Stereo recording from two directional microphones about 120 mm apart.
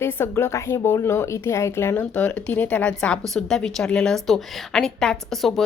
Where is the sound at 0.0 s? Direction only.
20° left (ahead or behind).